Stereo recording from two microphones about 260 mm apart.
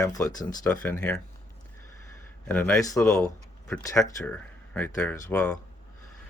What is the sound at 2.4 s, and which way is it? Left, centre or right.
Speech, centre.